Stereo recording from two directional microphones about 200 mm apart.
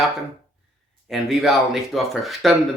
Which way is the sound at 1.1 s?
Centre (ahead or behind).